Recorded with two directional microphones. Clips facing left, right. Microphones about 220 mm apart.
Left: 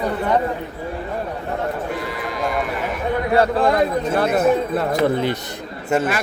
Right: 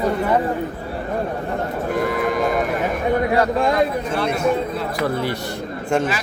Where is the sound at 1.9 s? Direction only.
50° right (ahead or behind).